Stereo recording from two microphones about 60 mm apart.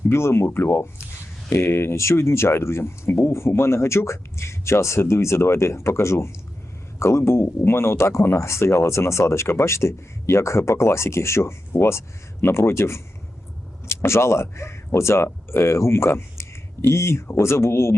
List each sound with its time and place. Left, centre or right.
0.1 s speech: left